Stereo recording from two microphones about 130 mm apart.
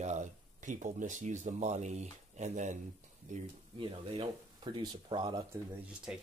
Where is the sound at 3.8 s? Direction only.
40° right (ahead or behind).